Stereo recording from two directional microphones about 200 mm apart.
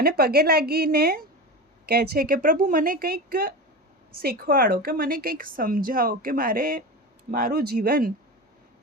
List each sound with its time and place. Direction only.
0.0 s a woman's voice: 50° right (ahead or behind)